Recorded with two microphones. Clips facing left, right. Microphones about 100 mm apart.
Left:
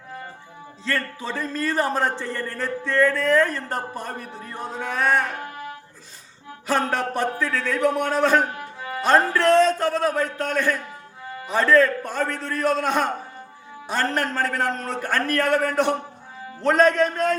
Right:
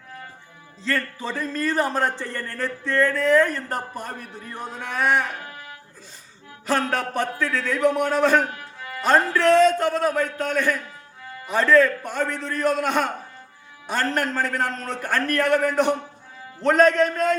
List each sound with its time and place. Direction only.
0.9 s speech: centre (ahead or behind)
6.9 s speech: centre (ahead or behind)
8.5 s music: 30° left (ahead or behind)
9.0 s speech: centre (ahead or behind)